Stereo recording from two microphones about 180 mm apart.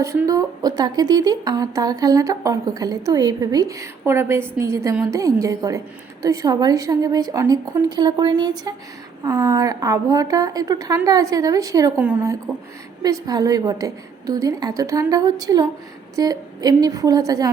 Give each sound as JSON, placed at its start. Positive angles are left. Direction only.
{"t": 0.0, "sound": "a woman's voice", "side_deg": -15}